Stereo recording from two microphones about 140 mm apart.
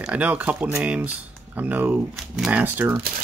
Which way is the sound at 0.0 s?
10° right (ahead or behind).